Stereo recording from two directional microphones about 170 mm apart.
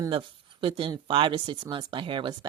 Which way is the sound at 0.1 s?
30° right (ahead or behind).